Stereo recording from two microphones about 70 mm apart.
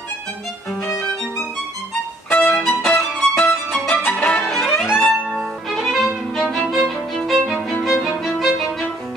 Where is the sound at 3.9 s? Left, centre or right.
Left.